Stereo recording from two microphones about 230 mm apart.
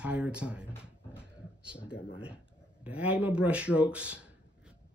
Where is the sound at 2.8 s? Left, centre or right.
Centre.